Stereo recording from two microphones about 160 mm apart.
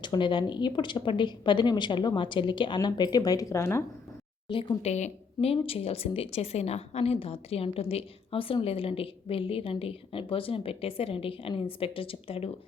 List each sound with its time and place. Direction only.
0.0 s speech: 30° left (ahead or behind)
4.4 s speech: 30° left (ahead or behind)